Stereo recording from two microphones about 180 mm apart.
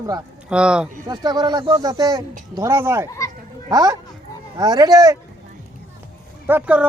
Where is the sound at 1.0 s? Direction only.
20° right (ahead or behind).